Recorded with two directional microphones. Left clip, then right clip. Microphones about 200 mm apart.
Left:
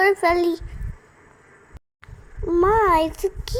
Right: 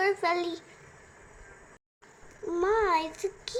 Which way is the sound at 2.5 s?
30° left (ahead or behind).